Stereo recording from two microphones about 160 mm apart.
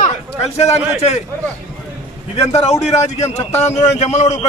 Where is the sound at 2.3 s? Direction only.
45° left (ahead or behind).